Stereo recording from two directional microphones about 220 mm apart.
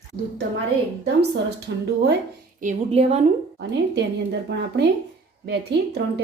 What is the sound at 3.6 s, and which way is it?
A woman's voice, 50° right (ahead or behind).